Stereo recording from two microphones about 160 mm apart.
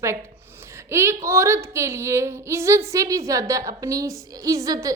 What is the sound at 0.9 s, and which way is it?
A woman's voice, 15° right (ahead or behind).